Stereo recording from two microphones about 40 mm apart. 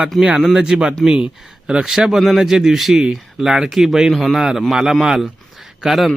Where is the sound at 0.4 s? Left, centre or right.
Centre.